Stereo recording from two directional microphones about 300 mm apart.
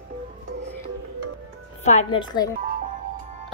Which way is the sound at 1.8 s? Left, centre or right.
Centre.